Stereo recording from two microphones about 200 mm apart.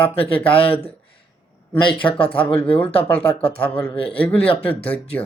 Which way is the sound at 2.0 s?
25° left (ahead or behind).